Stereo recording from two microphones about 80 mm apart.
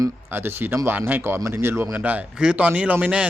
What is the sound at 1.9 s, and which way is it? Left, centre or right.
A man's voice, centre.